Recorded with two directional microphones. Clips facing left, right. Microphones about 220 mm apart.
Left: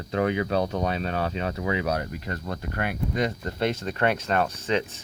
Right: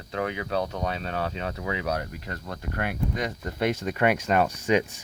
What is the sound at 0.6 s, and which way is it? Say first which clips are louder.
Speech: left 3 dB; 20° left (ahead or behind).